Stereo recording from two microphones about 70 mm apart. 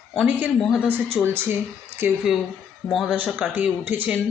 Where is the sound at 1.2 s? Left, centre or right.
Right.